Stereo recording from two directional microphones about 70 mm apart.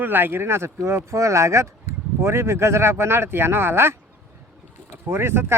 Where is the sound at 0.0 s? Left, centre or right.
Right.